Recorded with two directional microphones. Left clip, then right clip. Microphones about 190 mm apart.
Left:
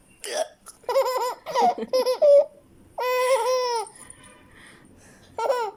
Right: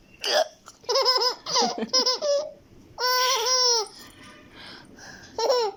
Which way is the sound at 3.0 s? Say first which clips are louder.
Left 1 dB; 45° left (ahead or behind).